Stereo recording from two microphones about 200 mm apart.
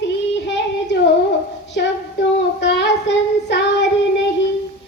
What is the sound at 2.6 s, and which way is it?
Child singing, 60° left (ahead or behind).